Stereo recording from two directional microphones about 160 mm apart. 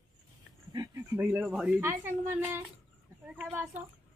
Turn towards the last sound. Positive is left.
turn(degrees=-10)  # may be behind; listen again after turning